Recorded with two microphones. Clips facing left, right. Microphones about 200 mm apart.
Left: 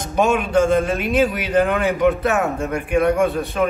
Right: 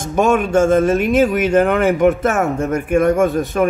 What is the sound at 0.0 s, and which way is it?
A man's voice, 50° right (ahead or behind).